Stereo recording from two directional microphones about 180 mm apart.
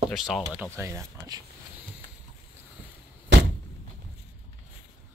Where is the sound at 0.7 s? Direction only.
15° right (ahead or behind).